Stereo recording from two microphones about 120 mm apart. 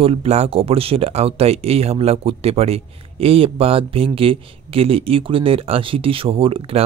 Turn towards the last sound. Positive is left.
turn(degrees=-50)  # may be behind; listen again after turning